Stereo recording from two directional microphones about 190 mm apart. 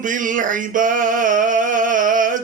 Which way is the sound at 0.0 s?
45° right (ahead or behind).